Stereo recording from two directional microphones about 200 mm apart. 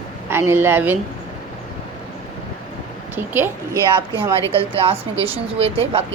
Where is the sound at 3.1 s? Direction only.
10° right (ahead or behind).